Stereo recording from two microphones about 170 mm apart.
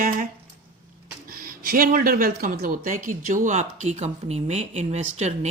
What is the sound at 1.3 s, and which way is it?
Speech, 55° right (ahead or behind).